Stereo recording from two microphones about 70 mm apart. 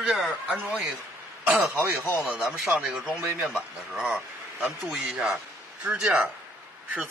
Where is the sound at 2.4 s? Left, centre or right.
Centre.